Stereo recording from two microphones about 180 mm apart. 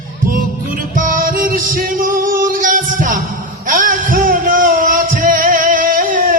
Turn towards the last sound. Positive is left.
turn(degrees=-50)  # may be behind; listen again after turning